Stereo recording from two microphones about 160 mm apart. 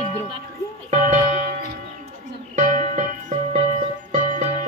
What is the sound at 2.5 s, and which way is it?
Music, 50° right (ahead or behind).